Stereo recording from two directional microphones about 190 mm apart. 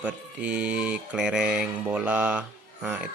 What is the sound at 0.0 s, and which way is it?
Speech, 5° right (ahead or behind).